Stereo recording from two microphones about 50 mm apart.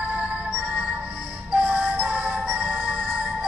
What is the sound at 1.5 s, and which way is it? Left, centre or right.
Music, right.